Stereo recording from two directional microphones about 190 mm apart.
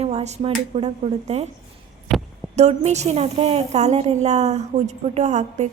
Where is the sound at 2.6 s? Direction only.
35° right (ahead or behind).